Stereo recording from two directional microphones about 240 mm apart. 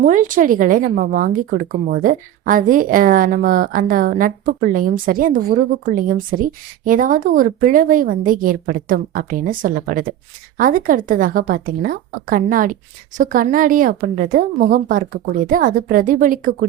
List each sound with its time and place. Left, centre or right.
0.0 s speech: right